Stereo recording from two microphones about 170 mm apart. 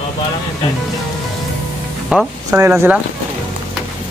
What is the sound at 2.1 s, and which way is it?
Speech, 5° right (ahead or behind).